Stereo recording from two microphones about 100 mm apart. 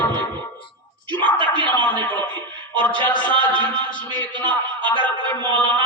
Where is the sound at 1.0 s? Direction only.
15° left (ahead or behind).